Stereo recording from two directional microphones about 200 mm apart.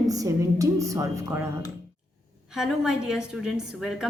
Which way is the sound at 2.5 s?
Centre (ahead or behind).